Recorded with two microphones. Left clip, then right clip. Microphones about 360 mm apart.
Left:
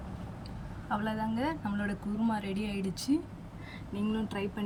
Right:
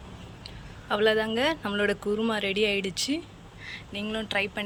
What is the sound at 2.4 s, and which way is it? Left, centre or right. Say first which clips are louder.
Speech: right 12 dB; centre.